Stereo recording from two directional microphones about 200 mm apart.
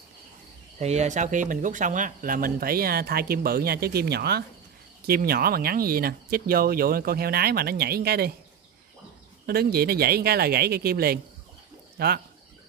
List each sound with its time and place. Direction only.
0.7 s speech: 35° right (ahead or behind); by 8.3 s 50° right (ahead or behind)
9.5 s speech: 50° right (ahead or behind)